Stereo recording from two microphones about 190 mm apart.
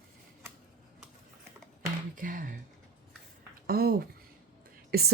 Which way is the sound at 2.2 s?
45° right (ahead or behind).